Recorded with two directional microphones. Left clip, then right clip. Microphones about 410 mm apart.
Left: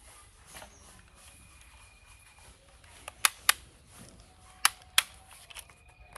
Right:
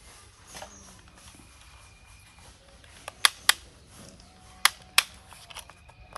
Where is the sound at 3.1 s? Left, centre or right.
Centre.